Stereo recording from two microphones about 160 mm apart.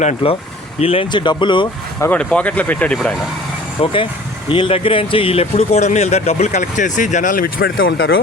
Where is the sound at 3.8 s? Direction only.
35° left (ahead or behind); by 7.7 s 60° left (ahead or behind).